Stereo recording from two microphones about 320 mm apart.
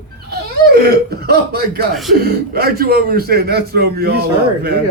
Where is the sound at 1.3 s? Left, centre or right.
Right.